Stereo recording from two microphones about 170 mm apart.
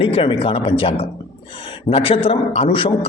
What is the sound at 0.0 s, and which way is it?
A man's voice, 35° left (ahead or behind).